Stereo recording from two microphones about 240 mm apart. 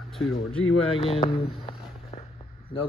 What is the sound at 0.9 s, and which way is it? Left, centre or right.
Speech, left.